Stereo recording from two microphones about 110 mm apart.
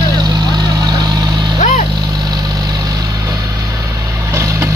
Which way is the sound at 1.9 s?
35° right (ahead or behind).